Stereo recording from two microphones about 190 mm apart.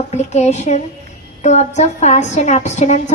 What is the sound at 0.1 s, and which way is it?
A woman's voice, 35° left (ahead or behind).